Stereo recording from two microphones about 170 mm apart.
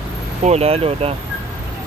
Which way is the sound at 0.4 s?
40° right (ahead or behind).